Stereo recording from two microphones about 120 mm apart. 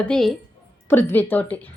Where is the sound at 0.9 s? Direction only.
15° left (ahead or behind).